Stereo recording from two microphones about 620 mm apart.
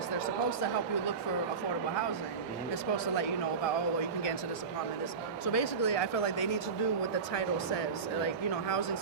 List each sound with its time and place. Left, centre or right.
5.5 s speech: left